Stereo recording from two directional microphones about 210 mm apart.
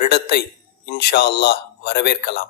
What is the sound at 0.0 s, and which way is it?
Speech, 50° left (ahead or behind).